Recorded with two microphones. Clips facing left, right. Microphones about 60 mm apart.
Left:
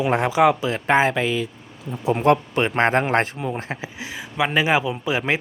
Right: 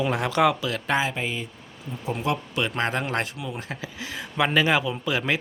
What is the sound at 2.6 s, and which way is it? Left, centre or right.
Speech, left.